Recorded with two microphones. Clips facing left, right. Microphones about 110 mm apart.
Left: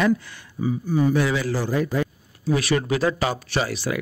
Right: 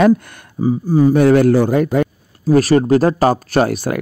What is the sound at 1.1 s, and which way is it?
Speech, 55° right (ahead or behind).